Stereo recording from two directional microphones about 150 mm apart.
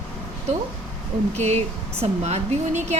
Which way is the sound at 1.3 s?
45° right (ahead or behind).